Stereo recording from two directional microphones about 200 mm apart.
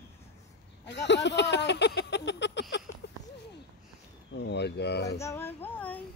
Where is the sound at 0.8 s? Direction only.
60° left (ahead or behind).